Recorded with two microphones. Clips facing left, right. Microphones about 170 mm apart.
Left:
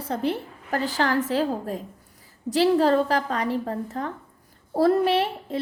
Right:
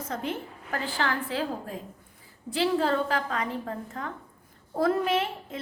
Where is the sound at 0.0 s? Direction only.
35° left (ahead or behind).